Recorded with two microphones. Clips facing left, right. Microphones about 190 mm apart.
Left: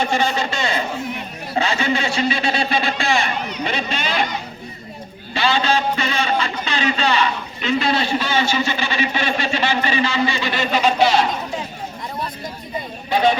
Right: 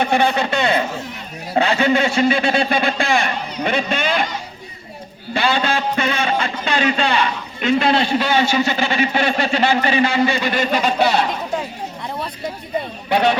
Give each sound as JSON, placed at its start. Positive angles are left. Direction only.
{"t": 0.0, "sound": "a man's voice", "side_deg": -60}
{"t": 5.3, "sound": "a man's voice", "side_deg": -55}
{"t": 13.1, "sound": "speech", "side_deg": -65}